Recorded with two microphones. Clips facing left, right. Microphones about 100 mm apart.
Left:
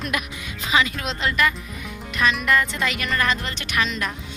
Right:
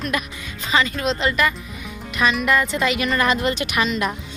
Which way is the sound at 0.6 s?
5° left (ahead or behind).